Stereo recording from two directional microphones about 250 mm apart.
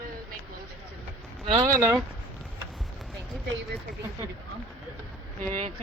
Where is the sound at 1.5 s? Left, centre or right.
Centre.